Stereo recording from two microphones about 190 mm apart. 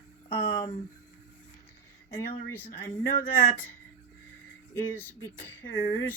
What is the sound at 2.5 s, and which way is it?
Speech, 10° left (ahead or behind).